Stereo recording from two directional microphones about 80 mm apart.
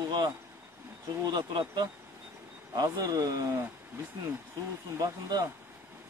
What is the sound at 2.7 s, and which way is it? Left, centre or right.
Speech, right.